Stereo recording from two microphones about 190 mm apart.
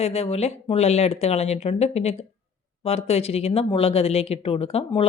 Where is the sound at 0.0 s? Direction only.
30° left (ahead or behind).